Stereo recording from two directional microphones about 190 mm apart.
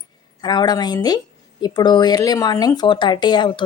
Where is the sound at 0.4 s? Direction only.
20° left (ahead or behind).